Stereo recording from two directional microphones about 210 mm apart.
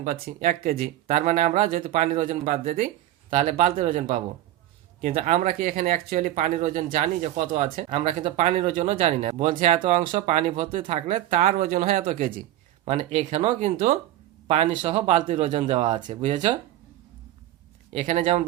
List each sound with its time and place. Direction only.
0.0 s speech: 40° right (ahead or behind)
17.9 s speech: 35° right (ahead or behind)